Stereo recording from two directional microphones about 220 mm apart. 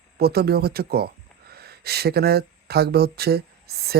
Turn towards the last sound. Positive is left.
turn(degrees=-45)  # may be behind; listen again after turning